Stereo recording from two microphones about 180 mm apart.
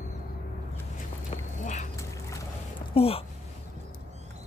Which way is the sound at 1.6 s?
45° left (ahead or behind).